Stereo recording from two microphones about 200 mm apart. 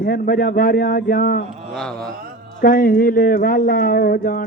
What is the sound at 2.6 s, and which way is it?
Speech, 45° left (ahead or behind).